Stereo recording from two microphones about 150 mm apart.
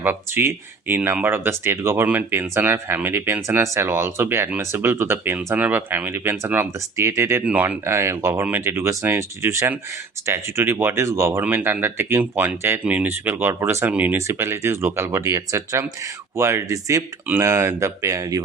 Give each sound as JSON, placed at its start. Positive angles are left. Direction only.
{"t": 0.0, "sound": "speech", "side_deg": -15}